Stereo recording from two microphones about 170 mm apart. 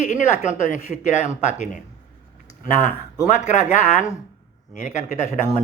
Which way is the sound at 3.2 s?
45° left (ahead or behind).